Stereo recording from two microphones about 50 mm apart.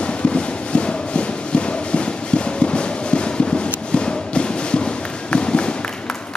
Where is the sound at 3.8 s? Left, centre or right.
Centre.